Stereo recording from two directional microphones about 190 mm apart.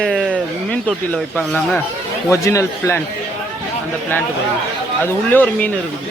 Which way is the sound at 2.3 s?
15° left (ahead or behind).